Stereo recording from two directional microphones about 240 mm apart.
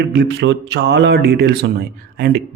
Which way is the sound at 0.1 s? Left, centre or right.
Right.